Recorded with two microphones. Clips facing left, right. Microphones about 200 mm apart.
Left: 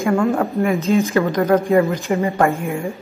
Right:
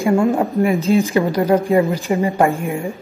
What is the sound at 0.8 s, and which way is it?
Speech, 30° right (ahead or behind).